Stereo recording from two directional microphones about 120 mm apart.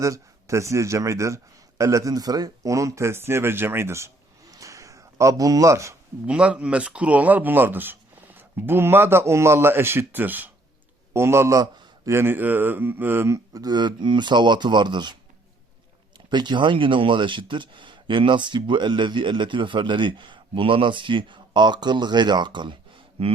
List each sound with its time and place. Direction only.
0.0 s speech: 25° right (ahead or behind)
4.5 s a sound: 25° right (ahead or behind)
6.2 s speech: 10° right (ahead or behind); by 22.8 s 40° right (ahead or behind)
23.2 s speech: 55° right (ahead or behind)